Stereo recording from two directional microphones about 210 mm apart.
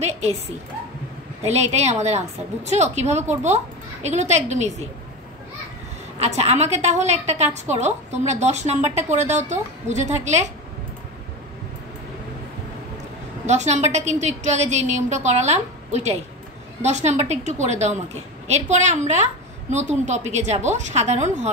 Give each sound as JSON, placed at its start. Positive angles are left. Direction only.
{"t": 1.4, "sound": "a woman's voice", "side_deg": -30}
{"t": 6.1, "sound": "a woman's voice", "side_deg": -30}
{"t": 13.5, "sound": "a woman's voice", "side_deg": -35}